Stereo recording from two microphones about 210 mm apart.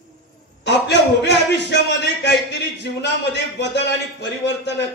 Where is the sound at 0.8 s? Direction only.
55° left (ahead or behind).